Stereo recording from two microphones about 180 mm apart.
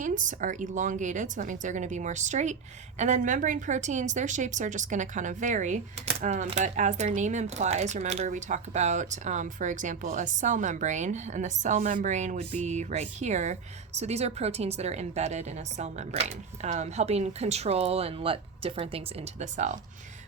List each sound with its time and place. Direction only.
0.0 s speech: 45° right (ahead or behind)